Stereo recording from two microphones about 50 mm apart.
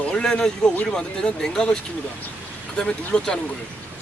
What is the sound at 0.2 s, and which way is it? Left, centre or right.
Speech, centre.